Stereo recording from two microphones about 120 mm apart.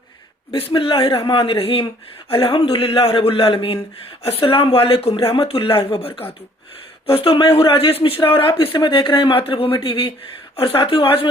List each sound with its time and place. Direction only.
0.7 s a man's voice: 45° left (ahead or behind)
7.1 s a man's voice: 50° left (ahead or behind)